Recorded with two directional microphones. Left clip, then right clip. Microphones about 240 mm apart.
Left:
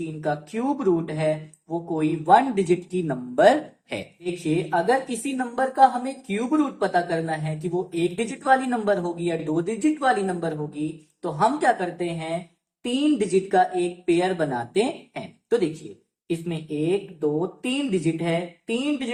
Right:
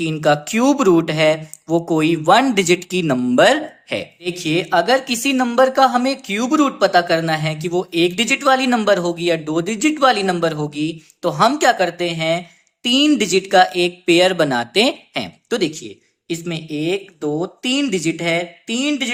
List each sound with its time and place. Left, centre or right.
0.2 s a woman's voice: right
4.4 s a woman's voice: right